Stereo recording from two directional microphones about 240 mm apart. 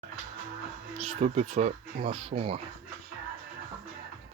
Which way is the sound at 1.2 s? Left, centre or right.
Right.